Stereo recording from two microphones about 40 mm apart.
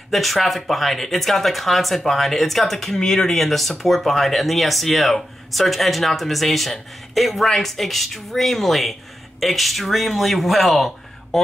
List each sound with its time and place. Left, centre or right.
0.1 s speech: centre